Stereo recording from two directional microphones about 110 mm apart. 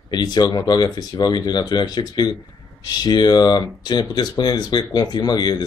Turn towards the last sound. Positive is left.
turn(degrees=40)  # may be behind; listen again after turning